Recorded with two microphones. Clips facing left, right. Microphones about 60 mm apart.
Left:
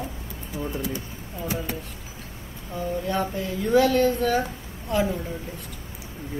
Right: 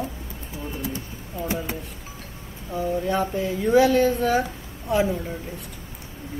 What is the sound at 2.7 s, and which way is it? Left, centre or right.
A woman's voice, centre.